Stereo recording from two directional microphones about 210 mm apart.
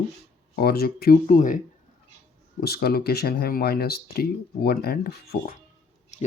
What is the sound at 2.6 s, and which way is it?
Speech, 50° left (ahead or behind).